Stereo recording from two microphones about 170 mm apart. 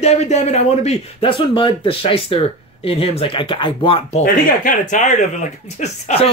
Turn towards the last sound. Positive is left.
turn(degrees=40)  # may be behind; listen again after turning